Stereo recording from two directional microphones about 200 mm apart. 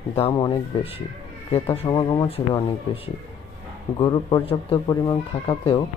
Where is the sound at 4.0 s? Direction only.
20° left (ahead or behind).